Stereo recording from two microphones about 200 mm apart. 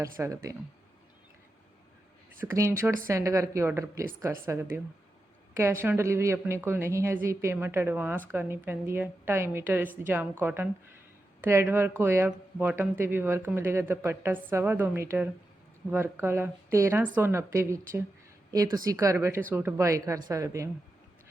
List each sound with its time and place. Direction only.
0.0 s speech: 15° right (ahead or behind)
2.4 s speech: 10° right (ahead or behind)
5.8 s speech: 10° right (ahead or behind)